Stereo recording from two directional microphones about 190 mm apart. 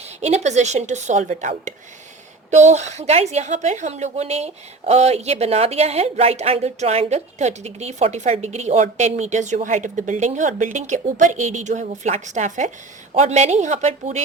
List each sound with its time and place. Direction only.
0.2 s a woman's voice: 35° right (ahead or behind)